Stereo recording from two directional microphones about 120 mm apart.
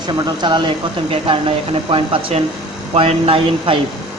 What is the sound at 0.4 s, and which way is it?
Speech, 40° right (ahead or behind).